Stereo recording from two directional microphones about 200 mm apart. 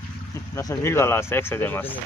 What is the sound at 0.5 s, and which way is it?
Speech, 15° left (ahead or behind).